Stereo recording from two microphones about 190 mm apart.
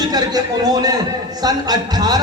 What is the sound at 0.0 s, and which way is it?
A man's voice, 20° right (ahead or behind).